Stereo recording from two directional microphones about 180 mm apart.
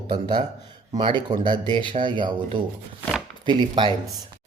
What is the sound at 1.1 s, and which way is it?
Speech, 25° right (ahead or behind).